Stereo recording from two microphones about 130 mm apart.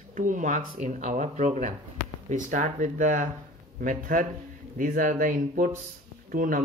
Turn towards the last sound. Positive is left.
turn(degrees=-90)